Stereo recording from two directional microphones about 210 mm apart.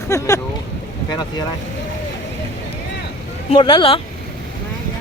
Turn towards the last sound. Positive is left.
turn(degrees=20)  # may be behind; listen again after turning